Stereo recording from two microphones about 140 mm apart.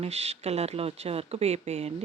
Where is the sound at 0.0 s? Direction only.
50° right (ahead or behind).